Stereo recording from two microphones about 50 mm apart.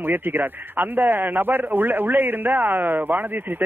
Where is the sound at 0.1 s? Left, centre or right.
Right.